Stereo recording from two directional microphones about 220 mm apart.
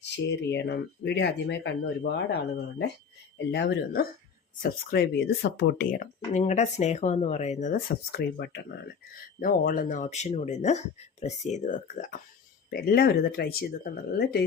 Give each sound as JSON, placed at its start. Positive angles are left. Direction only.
{"t": 0.0, "sound": "speech", "side_deg": 50}
{"t": 12.7, "sound": "speech", "side_deg": 45}